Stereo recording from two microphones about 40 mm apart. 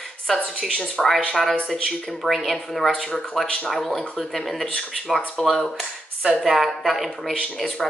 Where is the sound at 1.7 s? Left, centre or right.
Centre.